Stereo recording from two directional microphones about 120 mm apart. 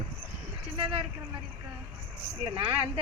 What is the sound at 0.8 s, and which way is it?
Vehicle, 50° right (ahead or behind).